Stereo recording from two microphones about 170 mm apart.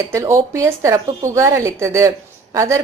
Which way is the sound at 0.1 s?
15° right (ahead or behind).